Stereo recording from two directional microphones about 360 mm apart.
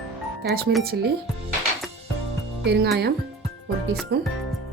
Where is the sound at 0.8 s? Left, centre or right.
Right.